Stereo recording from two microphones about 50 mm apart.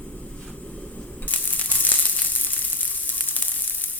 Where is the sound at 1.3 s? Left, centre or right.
Left.